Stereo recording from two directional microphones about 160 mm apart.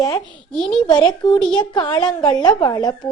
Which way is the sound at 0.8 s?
30° left (ahead or behind).